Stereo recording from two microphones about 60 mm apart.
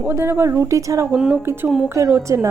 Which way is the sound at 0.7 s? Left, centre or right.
Right.